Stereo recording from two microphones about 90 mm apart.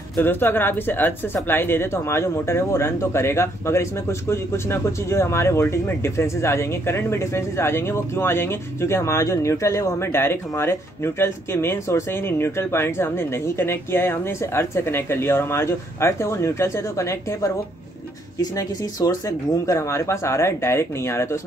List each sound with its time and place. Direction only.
0.2 s speech: 25° left (ahead or behind)
18.4 s speech: 45° left (ahead or behind)